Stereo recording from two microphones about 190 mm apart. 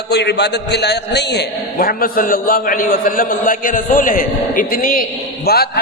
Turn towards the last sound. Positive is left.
turn(degrees=55)  # may be behind; listen again after turning